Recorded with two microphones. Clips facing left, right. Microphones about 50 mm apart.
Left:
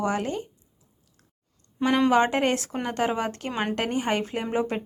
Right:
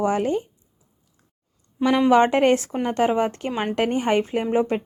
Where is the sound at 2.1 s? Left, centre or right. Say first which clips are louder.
Right 5 dB; right.